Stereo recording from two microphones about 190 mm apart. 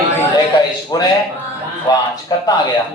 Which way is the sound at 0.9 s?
20° left (ahead or behind).